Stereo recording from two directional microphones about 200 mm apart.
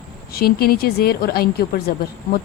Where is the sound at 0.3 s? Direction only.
50° left (ahead or behind).